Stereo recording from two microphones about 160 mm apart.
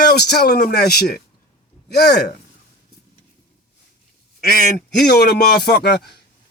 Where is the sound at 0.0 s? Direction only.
90° left.